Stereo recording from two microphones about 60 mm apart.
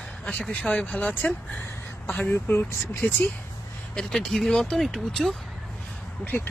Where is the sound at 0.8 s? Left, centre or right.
Left.